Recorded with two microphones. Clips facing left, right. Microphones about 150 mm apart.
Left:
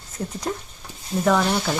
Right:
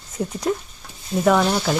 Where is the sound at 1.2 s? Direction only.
5° right (ahead or behind).